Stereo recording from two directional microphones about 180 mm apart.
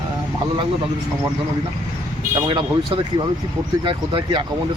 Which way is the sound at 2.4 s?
25° right (ahead or behind).